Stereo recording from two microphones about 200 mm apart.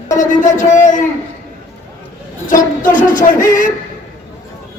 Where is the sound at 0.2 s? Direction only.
40° left (ahead or behind).